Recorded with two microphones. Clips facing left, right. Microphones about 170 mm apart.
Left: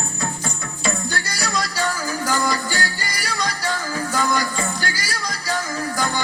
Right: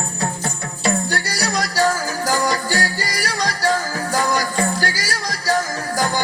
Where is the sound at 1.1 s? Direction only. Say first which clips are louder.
Right 3 dB; 35° right (ahead or behind).